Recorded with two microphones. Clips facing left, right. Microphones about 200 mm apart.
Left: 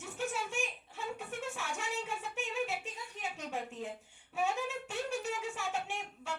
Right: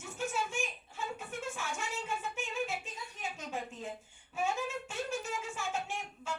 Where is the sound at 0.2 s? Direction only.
70° left (ahead or behind).